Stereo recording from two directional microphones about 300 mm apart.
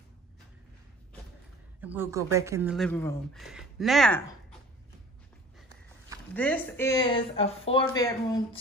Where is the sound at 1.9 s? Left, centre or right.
Centre.